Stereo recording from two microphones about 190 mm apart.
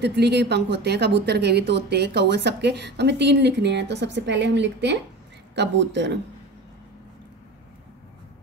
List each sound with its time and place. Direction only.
0.0 s speech: 60° right (ahead or behind)